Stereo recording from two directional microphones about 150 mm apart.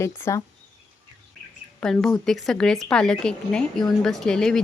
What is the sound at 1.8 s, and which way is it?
Speech, 5° left (ahead or behind).